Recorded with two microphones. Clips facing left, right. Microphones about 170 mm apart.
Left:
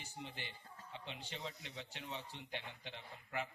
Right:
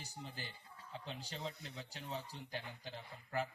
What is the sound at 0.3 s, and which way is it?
A man's voice, 40° right (ahead or behind).